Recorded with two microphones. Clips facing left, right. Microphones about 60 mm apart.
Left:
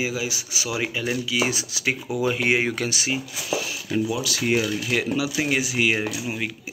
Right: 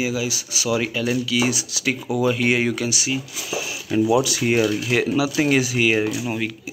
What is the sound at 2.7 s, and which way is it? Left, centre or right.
Speech, left.